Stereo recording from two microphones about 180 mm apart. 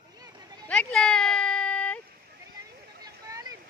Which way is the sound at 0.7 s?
5° left (ahead or behind).